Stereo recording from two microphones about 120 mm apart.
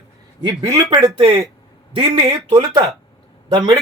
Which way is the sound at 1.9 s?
45° right (ahead or behind).